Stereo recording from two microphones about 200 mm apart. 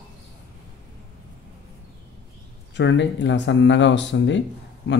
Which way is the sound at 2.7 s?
65° left (ahead or behind).